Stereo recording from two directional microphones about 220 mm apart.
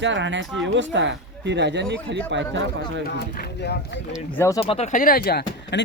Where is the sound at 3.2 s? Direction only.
50° left (ahead or behind).